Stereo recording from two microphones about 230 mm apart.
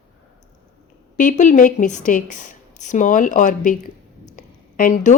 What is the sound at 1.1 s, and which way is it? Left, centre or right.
A woman's voice, left.